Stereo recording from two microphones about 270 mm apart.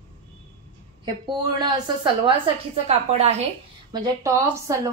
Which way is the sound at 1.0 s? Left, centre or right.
Centre.